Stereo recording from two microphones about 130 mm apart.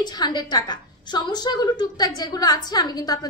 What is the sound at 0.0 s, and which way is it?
A woman's voice, 35° left (ahead or behind).